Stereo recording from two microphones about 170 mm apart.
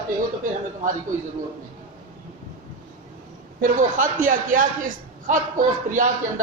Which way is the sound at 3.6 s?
55° right (ahead or behind).